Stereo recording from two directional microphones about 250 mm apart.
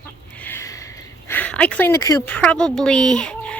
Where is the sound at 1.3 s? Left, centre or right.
Centre.